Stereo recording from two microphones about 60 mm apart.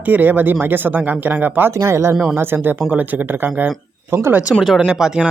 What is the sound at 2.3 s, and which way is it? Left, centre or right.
Speech, right.